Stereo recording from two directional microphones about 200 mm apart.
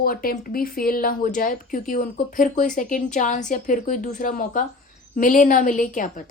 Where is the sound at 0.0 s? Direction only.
45° left (ahead or behind).